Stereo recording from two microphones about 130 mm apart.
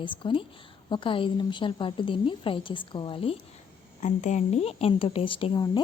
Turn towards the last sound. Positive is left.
turn(degrees=35)  # may be behind; listen again after turning